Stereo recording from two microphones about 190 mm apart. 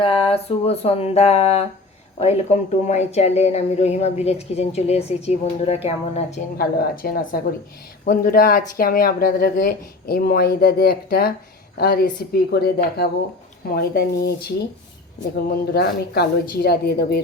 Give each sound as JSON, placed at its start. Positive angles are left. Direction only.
{"t": 0.0, "sound": "speech", "side_deg": 30}
{"t": 6.6, "sound": "speech", "side_deg": 50}